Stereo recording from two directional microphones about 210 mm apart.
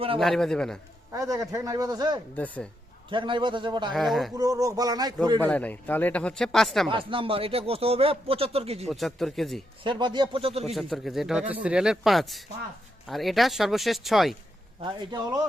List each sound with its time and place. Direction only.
0.2 s speech: centre (ahead or behind)
1.1 s a man's voice: 15° right (ahead or behind)
2.3 s speech: 5° left (ahead or behind)
3.1 s speech: 25° right (ahead or behind)
3.9 s speech: centre (ahead or behind)
4.4 s a man's voice: 15° right (ahead or behind)
5.4 s speech: 5° left (ahead or behind)
6.9 s speech: 25° right (ahead or behind)
8.9 s speech: centre (ahead or behind)
9.8 s speech: 20° right (ahead or behind)
10.8 s speech: centre (ahead or behind)
14.8 s speech: 20° right (ahead or behind)